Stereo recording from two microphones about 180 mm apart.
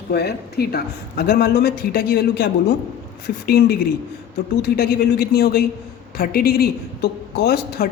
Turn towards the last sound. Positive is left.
turn(degrees=60)  # may be behind; listen again after turning